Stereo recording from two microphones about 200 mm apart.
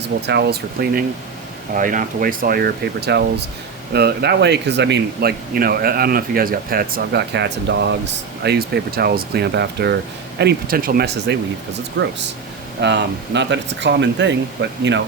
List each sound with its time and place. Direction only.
0.3 s speech: 55° right (ahead or behind)
12.0 s speech: 65° right (ahead or behind)